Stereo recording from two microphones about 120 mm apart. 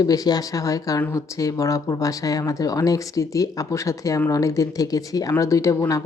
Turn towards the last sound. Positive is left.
turn(degrees=25)  # may be behind; listen again after turning